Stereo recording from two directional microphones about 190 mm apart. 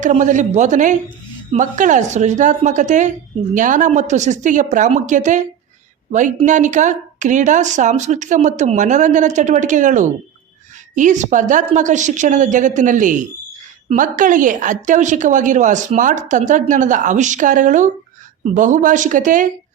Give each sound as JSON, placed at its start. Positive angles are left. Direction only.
{"t": 0.0, "sound": "a woman's voice", "side_deg": -40}